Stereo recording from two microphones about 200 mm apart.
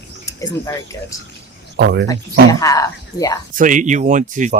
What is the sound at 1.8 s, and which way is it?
Speech, 60° right (ahead or behind).